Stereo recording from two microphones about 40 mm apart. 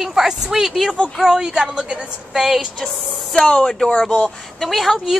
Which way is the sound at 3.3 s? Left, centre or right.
Centre.